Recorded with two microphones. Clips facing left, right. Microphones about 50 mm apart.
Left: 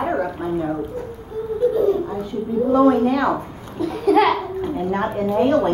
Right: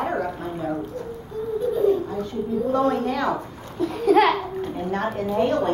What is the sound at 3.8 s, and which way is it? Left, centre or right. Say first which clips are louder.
Babbling: left 1 dB; centre.